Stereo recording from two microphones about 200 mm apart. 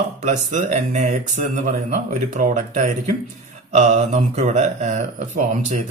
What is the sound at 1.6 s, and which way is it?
Speech, 40° right (ahead or behind).